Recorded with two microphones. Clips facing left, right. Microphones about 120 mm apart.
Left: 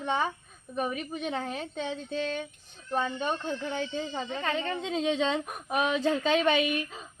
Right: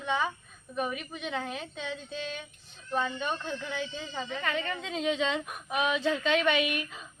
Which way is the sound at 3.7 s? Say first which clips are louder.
Left 4 dB; 40° left (ahead or behind).